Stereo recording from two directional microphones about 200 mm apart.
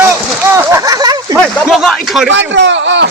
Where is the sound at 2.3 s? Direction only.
65° right (ahead or behind).